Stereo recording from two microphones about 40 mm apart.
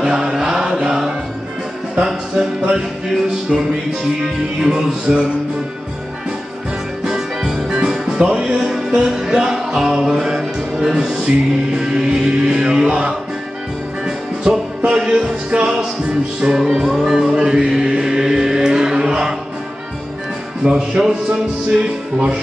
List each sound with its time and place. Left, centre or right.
0.0 s mantra: centre
2.7 s music: centre
7.1 s music: centre
7.7 s music: right
14.0 s music: centre
17.0 s chant: centre
20.6 s music: right